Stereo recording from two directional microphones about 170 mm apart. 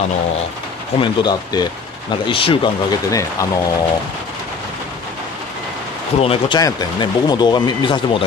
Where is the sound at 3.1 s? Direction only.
20° left (ahead or behind).